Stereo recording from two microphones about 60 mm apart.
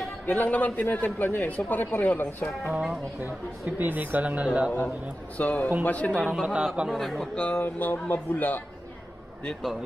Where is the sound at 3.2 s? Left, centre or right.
Right.